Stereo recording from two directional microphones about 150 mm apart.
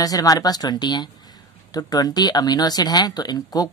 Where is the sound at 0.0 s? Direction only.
25° left (ahead or behind).